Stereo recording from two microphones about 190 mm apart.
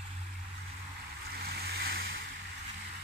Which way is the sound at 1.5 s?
55° right (ahead or behind).